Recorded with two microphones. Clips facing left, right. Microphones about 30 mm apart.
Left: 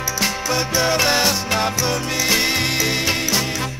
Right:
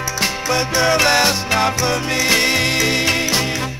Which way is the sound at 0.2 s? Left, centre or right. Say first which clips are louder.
Right 3 dB; centre.